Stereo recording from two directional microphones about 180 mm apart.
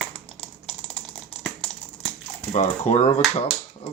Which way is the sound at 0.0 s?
5° left (ahead or behind).